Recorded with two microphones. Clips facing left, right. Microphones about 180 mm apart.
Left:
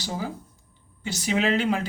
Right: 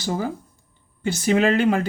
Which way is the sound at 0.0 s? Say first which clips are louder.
Right 6 dB; 50° right (ahead or behind).